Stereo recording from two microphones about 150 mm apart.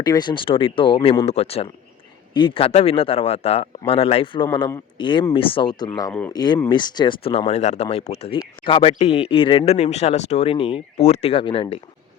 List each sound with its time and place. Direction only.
0.0 s speech: 30° left (ahead or behind)